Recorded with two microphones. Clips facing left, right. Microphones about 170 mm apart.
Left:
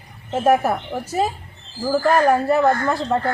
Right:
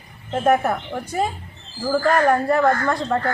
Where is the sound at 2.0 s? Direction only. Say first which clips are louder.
Left 2 dB; 25° left (ahead or behind).